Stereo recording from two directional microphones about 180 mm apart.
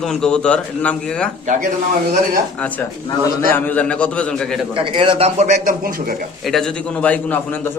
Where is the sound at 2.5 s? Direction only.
10° left (ahead or behind).